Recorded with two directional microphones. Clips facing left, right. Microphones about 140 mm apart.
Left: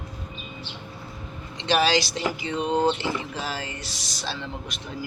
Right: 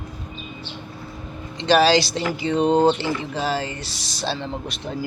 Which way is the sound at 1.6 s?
35° right (ahead or behind).